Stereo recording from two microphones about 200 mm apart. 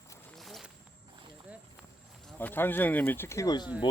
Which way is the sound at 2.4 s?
10° left (ahead or behind).